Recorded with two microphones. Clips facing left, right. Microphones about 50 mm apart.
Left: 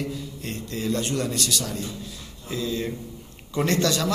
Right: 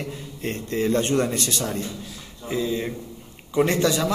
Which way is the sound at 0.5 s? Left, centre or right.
Right.